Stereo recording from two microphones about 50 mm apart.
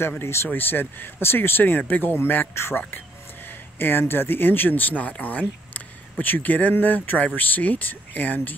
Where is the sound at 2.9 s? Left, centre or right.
Left.